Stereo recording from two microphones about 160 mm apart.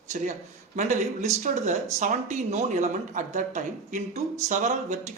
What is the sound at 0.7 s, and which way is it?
Speech, 50° right (ahead or behind).